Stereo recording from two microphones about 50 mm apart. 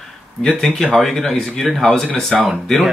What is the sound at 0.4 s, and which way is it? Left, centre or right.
Speech, centre.